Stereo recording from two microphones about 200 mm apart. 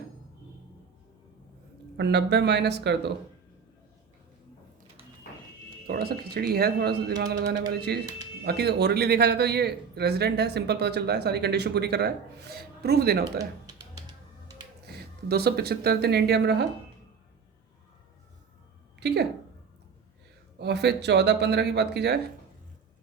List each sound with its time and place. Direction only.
2.0 s a man's voice: 55° right (ahead or behind)
5.9 s a man's voice: 50° right (ahead or behind)
13.4 s music: 20° right (ahead or behind)
14.8 s speech: 50° right (ahead or behind)
18.9 s a woman's voice: 55° right (ahead or behind)
20.6 s a man's voice: 55° right (ahead or behind)